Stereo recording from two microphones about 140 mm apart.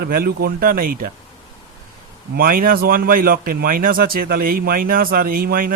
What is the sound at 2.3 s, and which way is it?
Speech, 90° right.